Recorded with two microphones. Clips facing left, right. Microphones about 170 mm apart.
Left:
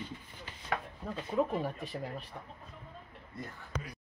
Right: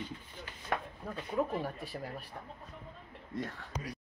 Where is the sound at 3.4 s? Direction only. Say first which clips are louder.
Right 6 dB; 90° right.